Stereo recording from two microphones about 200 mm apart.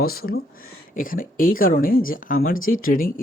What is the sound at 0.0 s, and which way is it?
Speech, 50° left (ahead or behind).